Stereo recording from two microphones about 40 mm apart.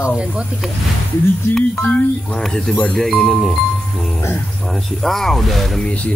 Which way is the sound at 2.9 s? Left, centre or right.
Centre.